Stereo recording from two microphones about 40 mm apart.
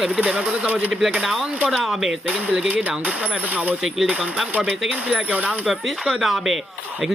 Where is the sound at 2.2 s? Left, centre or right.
Right.